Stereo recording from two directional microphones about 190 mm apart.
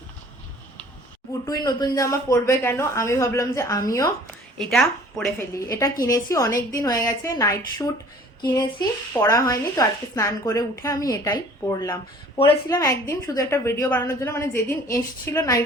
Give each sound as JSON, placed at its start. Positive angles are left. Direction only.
{"t": 1.5, "sound": "a woman's voice", "side_deg": 20}
{"t": 4.5, "sound": "speech", "side_deg": 0}
{"t": 5.5, "sound": "a woman's voice", "side_deg": 15}